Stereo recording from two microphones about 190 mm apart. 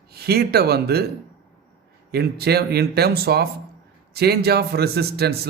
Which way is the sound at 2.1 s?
55° right (ahead or behind).